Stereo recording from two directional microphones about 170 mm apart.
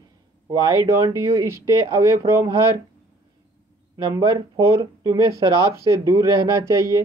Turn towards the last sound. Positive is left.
turn(degrees=-20)  # may be behind; listen again after turning